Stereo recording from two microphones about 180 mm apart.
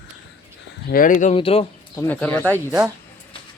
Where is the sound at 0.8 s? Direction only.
50° left (ahead or behind).